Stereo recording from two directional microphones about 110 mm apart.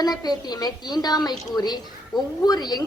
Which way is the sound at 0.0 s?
35° left (ahead or behind).